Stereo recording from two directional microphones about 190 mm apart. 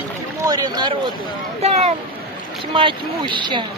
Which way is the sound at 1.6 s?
35° right (ahead or behind).